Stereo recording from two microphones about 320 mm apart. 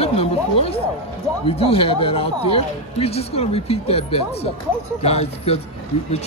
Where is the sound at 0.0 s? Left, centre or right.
Centre.